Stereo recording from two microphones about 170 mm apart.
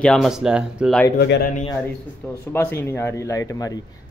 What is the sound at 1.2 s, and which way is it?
Speech, 65° left (ahead or behind).